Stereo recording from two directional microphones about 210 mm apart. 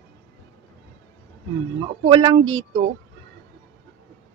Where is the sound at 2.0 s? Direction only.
25° right (ahead or behind).